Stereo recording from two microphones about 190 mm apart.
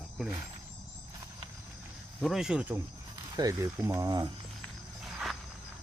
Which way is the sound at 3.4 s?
15° right (ahead or behind).